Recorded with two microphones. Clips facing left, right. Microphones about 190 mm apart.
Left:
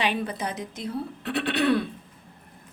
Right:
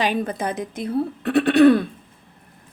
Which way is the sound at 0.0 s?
40° right (ahead or behind).